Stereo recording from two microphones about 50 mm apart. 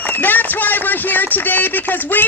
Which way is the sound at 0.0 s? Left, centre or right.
Left.